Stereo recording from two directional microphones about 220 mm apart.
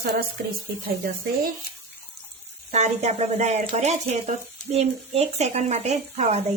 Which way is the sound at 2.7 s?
30° right (ahead or behind).